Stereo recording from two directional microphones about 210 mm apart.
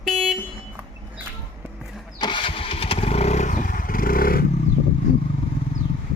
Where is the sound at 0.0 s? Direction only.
Centre (ahead or behind).